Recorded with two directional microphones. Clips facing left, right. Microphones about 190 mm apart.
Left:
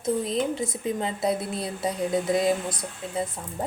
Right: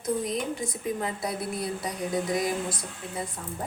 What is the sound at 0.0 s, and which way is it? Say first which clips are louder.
A woman's voice: left 3 dB; 25° left (ahead or behind).